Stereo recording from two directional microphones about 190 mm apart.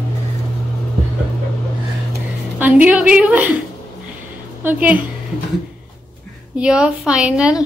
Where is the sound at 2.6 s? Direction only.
10° right (ahead or behind).